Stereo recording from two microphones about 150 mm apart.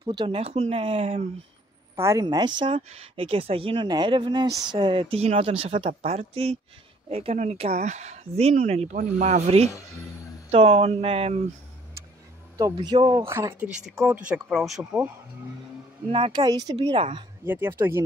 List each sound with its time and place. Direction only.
0.0 s speech: 30° right (ahead or behind)
2.0 s speech: 20° right (ahead or behind)
5.1 s speech: 45° right (ahead or behind)
12.5 s speech: 25° right (ahead or behind)
14.0 s speech: 5° right (ahead or behind)
16.1 s speech: 35° right (ahead or behind)
17.5 s speech: 15° right (ahead or behind)